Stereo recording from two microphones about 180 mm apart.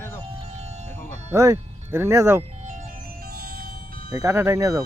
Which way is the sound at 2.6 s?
45° right (ahead or behind).